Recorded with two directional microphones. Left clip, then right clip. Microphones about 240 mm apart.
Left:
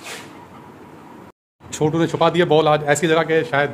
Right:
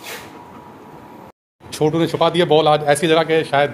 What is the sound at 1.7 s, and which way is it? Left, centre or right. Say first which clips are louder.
A man's voice: right 2 dB; centre.